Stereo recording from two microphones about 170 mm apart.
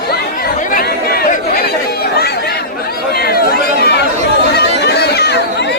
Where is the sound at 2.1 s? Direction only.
70° left (ahead or behind).